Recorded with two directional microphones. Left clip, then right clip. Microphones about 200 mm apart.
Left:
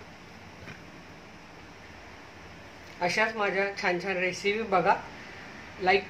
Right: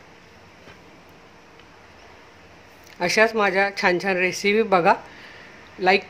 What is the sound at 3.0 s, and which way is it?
Speech, 50° right (ahead or behind).